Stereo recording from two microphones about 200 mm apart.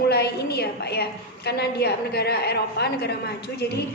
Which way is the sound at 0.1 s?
55° left (ahead or behind).